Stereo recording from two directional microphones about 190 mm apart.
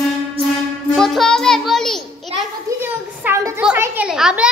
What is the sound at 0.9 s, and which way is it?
Child singing, centre (ahead or behind).